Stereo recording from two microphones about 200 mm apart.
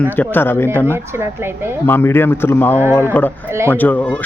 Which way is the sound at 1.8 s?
10° left (ahead or behind).